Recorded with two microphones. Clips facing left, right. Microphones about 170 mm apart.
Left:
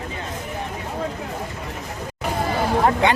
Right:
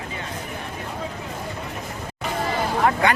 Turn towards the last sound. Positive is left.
turn(degrees=20)  # may be behind; listen again after turning